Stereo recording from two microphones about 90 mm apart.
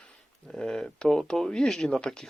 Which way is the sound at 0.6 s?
5° left (ahead or behind).